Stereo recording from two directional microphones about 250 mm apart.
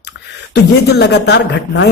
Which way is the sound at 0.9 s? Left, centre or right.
Left.